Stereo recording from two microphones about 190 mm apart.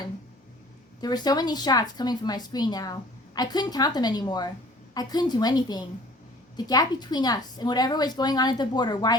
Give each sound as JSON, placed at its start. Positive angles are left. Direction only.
{"t": 1.0, "sound": "speech", "side_deg": 20}